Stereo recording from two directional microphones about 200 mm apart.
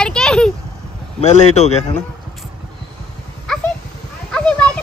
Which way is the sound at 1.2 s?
35° left (ahead or behind).